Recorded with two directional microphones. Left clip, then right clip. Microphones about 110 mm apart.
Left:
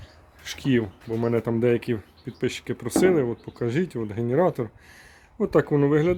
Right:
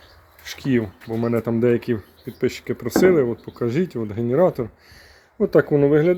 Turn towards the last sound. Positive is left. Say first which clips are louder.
# right 5 dB
turn(degrees=15)  # may be behind; listen again after turning